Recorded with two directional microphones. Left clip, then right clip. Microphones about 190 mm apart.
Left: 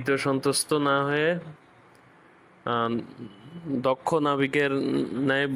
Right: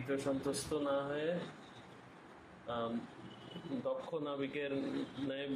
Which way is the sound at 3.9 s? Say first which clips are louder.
Left 16 dB; 55° left (ahead or behind).